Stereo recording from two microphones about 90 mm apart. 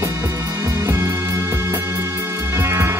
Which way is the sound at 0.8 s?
30° right (ahead or behind).